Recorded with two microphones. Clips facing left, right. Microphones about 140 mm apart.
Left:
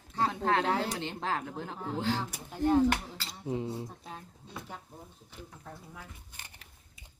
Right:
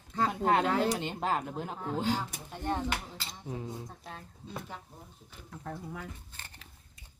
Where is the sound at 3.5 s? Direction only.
15° left (ahead or behind).